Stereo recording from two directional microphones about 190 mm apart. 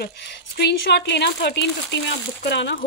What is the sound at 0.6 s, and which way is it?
Speech, 60° left (ahead or behind).